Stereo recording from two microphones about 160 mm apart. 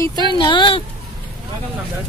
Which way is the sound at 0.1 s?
30° right (ahead or behind).